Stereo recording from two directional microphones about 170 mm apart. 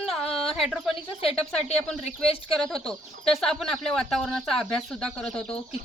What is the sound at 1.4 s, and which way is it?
Speech, 5° left (ahead or behind).